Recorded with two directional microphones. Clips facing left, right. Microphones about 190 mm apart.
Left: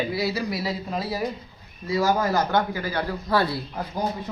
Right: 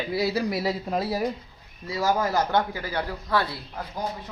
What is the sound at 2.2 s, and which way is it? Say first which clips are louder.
Speech: left 1 dB; 25° right (ahead or behind).